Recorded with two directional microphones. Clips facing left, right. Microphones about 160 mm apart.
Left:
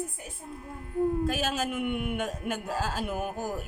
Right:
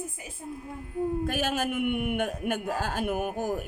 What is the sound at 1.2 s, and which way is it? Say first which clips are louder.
A man's voice: right 1 dB; 55° right (ahead or behind).